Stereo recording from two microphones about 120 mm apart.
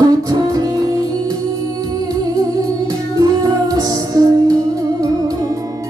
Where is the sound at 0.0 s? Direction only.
30° right (ahead or behind).